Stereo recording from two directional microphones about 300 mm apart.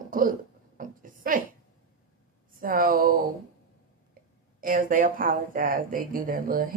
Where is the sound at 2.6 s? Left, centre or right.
Right.